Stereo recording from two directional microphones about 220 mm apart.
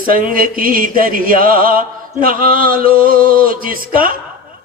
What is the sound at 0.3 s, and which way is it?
Mantra, 40° right (ahead or behind).